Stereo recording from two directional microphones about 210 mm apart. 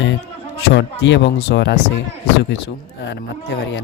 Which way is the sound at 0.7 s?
60° left (ahead or behind).